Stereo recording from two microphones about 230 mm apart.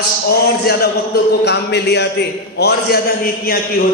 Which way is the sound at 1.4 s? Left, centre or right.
Left.